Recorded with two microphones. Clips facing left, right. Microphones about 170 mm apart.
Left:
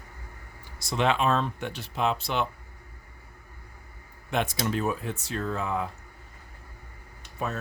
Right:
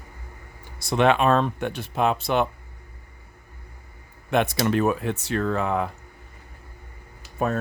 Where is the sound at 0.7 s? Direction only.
60° right (ahead or behind).